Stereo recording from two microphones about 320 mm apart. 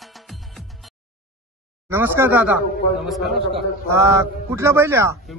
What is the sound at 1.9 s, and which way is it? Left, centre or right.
A man's voice, centre.